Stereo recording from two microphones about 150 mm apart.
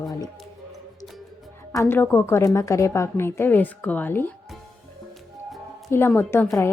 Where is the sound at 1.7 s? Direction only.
15° left (ahead or behind).